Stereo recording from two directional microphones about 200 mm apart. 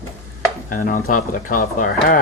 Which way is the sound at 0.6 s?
45° left (ahead or behind).